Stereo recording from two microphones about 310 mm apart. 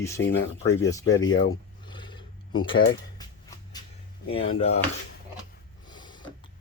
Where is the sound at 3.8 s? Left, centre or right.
Centre.